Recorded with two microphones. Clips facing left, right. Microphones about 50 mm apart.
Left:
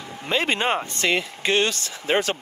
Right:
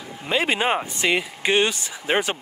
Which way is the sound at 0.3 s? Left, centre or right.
Centre.